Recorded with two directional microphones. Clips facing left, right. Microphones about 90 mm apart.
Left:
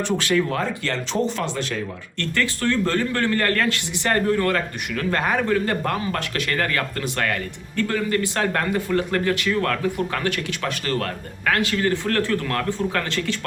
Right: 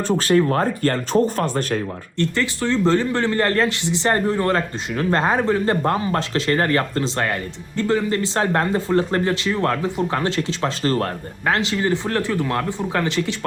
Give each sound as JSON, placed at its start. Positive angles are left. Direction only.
{"t": 0.2, "sound": "speech", "side_deg": -40}
{"t": 2.1, "sound": "speech", "side_deg": -20}